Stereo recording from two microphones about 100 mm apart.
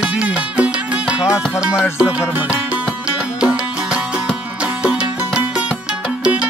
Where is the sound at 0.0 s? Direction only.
10° right (ahead or behind).